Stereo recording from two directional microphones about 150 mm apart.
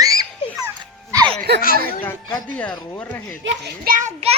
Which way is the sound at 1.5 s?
90° right.